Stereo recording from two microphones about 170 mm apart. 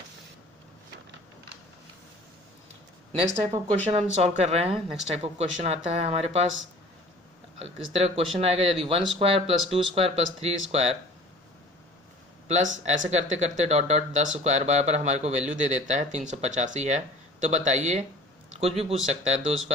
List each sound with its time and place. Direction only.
3.2 s speech: 35° right (ahead or behind)
7.6 s speech: 35° right (ahead or behind)
12.5 s speech: 45° right (ahead or behind)